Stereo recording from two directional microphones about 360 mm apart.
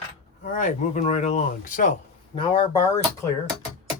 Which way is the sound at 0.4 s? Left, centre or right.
Left.